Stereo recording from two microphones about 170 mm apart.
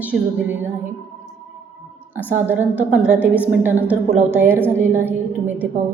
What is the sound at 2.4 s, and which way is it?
A woman's voice, 10° right (ahead or behind).